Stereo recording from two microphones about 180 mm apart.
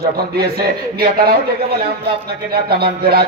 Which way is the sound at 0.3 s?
60° right (ahead or behind).